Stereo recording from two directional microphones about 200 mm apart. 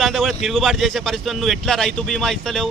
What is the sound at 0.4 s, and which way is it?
Speech, centre (ahead or behind).